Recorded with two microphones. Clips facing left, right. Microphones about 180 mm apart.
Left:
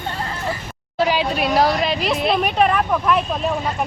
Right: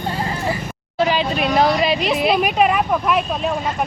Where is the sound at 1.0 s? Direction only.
5° left (ahead or behind).